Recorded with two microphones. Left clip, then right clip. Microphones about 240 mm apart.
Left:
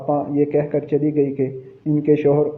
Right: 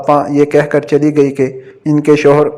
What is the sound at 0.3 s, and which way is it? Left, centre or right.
A man's voice, right.